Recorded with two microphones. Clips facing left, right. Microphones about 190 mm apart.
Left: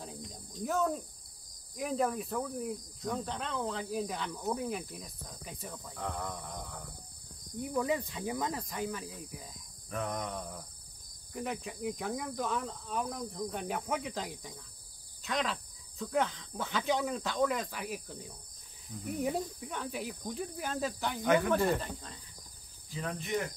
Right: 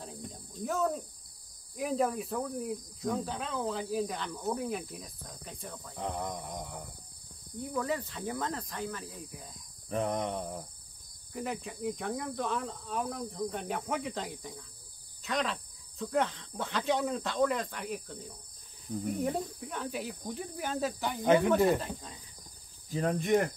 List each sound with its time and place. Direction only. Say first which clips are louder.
0.0 s cricket: right 1 dB; 5° right (ahead or behind)
5.9 s mantra: right 3 dB; 20° right (ahead or behind)
7.7 s speech: left 1 dB; 15° left (ahead or behind)
9.8 s cricket: right 5 dB; 30° right (ahead or behind)
11.3 s cricket: right 1 dB; centre (ahead or behind)
19.1 s cricket: left 3 dB; centre (ahead or behind)
21.2 s cricket: right 3 dB; 25° right (ahead or behind)
21.6 s cricket: right 3 dB; 5° right (ahead or behind)
22.9 s speech: right 8 dB; 50° right (ahead or behind)